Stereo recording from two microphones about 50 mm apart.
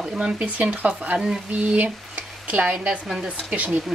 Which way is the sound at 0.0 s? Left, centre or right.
Centre.